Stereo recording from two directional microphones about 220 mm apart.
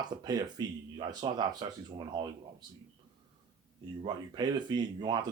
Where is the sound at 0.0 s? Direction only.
20° right (ahead or behind).